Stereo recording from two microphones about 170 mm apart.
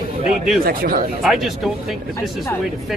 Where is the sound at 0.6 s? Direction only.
60° right (ahead or behind).